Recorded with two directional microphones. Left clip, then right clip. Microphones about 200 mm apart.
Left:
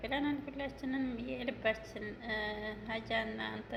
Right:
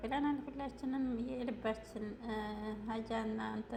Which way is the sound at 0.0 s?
25° right (ahead or behind).